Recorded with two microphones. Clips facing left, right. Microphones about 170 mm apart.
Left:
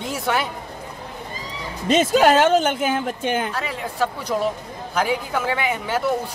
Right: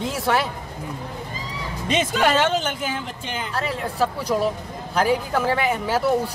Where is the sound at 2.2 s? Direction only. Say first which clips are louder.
Left 3 dB; 45° left (ahead or behind).